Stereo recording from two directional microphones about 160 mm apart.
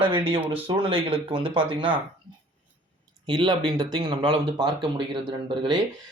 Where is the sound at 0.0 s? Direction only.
35° right (ahead or behind).